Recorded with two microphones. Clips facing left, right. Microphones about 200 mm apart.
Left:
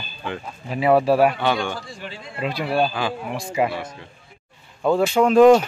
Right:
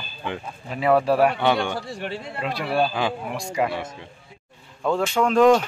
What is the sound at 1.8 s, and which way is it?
Speech, 65° right (ahead or behind).